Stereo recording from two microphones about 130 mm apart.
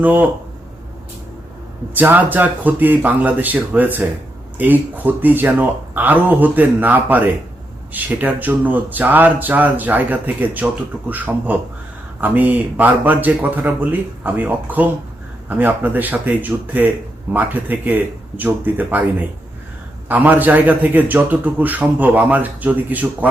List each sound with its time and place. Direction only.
0.0 s a man's voice: 15° right (ahead or behind)
2.0 s a man's voice: 15° right (ahead or behind)
20.1 s a man's voice: 10° right (ahead or behind)